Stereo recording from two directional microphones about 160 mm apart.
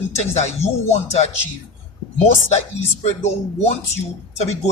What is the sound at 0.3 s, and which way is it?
Speech, 45° left (ahead or behind).